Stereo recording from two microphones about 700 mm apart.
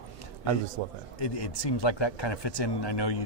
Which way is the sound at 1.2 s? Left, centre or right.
Left.